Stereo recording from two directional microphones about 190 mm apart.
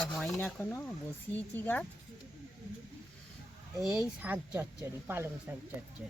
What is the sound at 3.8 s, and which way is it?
Speech, centre (ahead or behind).